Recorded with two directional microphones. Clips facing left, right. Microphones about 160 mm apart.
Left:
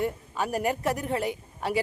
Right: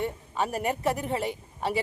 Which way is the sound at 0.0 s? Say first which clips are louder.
Left 1 dB; centre (ahead or behind).